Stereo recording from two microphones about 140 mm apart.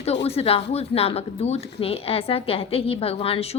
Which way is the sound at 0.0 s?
45° left (ahead or behind).